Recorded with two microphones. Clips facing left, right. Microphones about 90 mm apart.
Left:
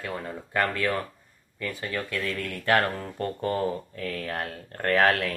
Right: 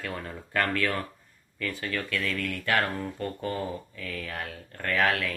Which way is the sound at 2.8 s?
40° left (ahead or behind).